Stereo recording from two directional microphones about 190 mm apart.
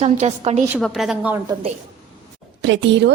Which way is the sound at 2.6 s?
70° right (ahead or behind).